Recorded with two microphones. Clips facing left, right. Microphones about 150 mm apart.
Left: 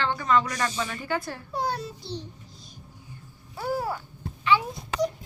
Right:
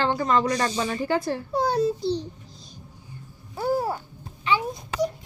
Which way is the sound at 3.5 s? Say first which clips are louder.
Right 4 dB; 25° right (ahead or behind).